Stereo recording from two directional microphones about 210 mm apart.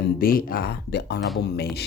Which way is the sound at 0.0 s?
45° left (ahead or behind).